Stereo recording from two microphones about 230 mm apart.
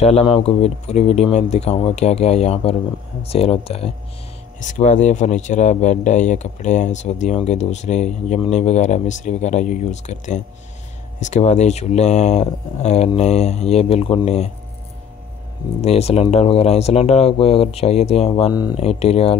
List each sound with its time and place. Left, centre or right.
0.0 s speech: left
15.8 s speech: left